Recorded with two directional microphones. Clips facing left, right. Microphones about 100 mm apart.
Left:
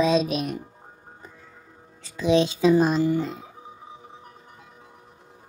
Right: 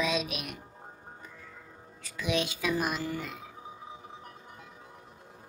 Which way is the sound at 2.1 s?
30° left (ahead or behind).